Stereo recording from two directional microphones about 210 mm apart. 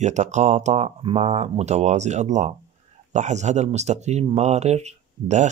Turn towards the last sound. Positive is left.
turn(degrees=-35)  # may be behind; listen again after turning